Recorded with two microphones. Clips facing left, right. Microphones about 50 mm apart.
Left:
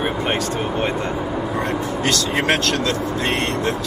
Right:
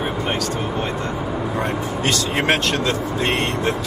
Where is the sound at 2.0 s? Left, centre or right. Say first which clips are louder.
Even; right.